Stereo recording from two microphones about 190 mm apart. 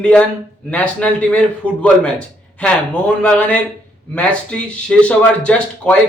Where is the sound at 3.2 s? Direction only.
5° left (ahead or behind).